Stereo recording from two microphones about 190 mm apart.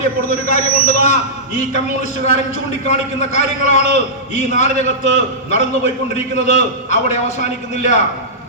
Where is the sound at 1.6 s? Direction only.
35° left (ahead or behind).